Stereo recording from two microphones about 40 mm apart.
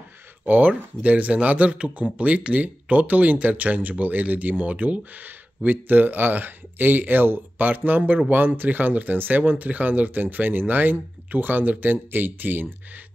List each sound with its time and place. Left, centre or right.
0.5 s speech: right
7.6 s speech: right